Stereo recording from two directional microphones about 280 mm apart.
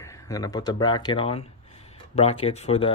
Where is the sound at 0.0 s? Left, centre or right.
Centre.